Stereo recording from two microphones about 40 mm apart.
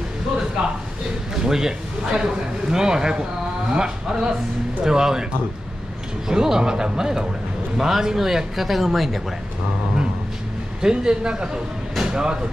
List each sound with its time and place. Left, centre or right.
0.6 s a man's voice: right
6.2 s a man's voice: centre
10.8 s a man's voice: centre